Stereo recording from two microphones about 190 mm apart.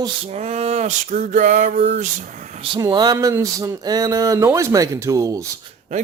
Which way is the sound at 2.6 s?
25° right (ahead or behind).